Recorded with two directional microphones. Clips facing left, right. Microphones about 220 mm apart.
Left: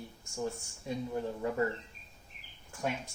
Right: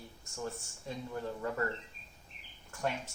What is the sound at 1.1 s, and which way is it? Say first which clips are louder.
Speech: left 2 dB; 15° left (ahead or behind).